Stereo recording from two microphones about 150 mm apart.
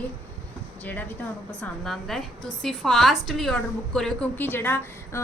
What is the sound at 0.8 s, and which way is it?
A woman's voice, 10° left (ahead or behind).